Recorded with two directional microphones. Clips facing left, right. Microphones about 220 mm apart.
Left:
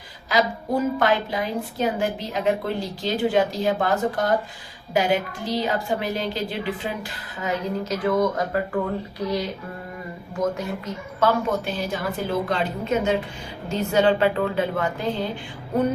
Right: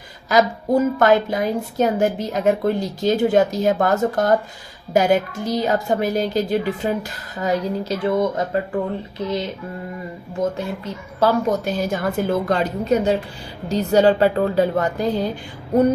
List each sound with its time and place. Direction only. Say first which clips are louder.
0.3 s a woman's voice: right 5 dB; 45° right (ahead or behind)
7.3 s speech: right 5 dB; 35° right (ahead or behind)
11.2 s a woman's voice: right 4 dB; 45° right (ahead or behind)